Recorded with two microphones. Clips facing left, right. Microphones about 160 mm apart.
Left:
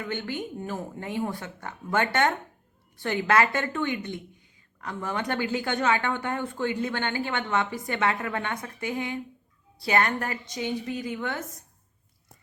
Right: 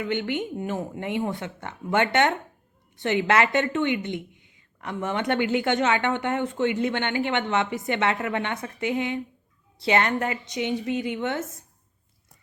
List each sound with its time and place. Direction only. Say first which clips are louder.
0.1 s a woman's voice: right 5 dB; 20° right (ahead or behind)